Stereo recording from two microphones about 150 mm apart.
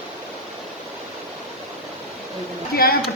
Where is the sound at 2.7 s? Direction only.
90° left.